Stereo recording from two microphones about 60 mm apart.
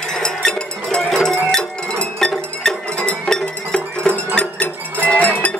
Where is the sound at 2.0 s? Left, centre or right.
Centre.